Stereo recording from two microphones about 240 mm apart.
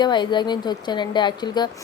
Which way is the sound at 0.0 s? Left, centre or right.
Centre.